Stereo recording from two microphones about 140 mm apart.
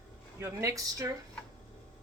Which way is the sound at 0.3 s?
20° right (ahead or behind).